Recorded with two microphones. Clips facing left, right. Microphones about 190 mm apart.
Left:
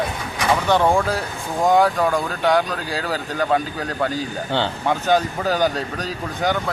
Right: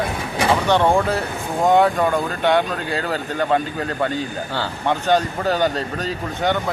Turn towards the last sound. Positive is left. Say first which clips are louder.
# right 1 dB
turn(degrees=0)  # may be behind; listen again after turning